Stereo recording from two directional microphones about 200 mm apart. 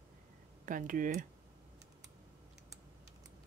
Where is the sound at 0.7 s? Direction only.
40° right (ahead or behind).